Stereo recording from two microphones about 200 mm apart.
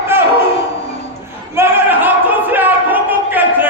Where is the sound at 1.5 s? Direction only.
10° right (ahead or behind).